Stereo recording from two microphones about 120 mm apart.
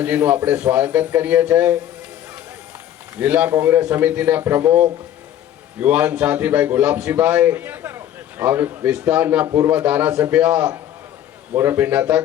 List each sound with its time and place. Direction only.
0.0 s a man's voice: 15° right (ahead or behind)
3.2 s a man's voice: 15° right (ahead or behind)